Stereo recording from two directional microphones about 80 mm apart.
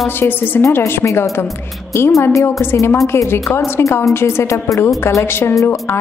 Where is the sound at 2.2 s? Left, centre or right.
Left.